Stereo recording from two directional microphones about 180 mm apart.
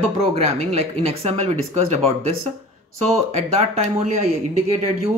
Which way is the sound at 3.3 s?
35° right (ahead or behind).